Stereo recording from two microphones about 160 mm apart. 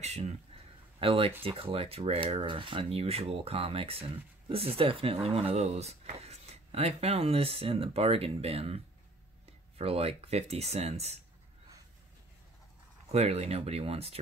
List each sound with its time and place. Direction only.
0.0 s speech: 45° right (ahead or behind)
13.1 s speech: 40° right (ahead or behind)